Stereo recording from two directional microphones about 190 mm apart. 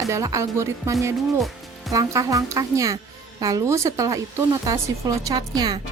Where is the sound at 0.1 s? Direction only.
15° right (ahead or behind).